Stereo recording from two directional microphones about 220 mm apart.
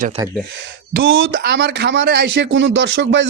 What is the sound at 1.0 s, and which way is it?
Speech, 60° right (ahead or behind).